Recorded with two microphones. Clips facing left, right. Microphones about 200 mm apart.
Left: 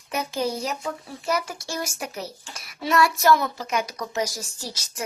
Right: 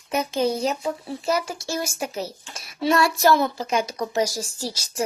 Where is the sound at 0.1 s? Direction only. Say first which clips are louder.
Right 4 dB; 25° right (ahead or behind).